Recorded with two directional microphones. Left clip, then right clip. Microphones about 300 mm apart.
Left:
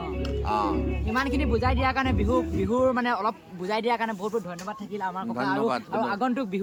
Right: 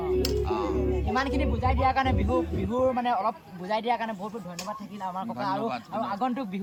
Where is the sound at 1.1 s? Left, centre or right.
Centre.